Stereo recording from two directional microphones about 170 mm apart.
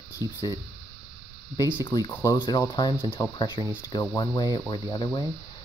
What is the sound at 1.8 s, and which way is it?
Speech, 25° left (ahead or behind).